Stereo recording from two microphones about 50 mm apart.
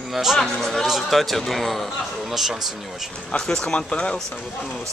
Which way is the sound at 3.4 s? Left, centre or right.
Centre.